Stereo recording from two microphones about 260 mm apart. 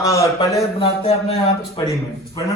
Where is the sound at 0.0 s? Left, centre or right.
Centre.